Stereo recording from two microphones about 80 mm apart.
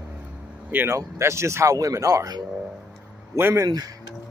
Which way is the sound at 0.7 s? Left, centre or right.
Right.